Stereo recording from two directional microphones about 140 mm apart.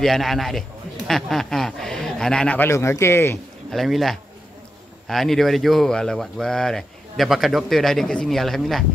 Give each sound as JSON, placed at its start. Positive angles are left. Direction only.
{"t": 0.0, "sound": "a man's voice", "side_deg": 0}
{"t": 3.7, "sound": "speech", "side_deg": 0}